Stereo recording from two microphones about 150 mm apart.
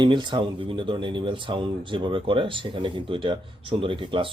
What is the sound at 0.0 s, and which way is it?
Speech, 30° right (ahead or behind).